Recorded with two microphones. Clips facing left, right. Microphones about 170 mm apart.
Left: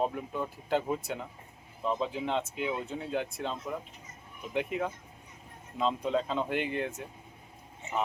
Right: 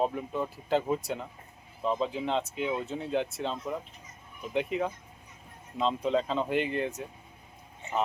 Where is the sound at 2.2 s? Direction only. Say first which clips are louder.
Right 2 dB; 5° left (ahead or behind).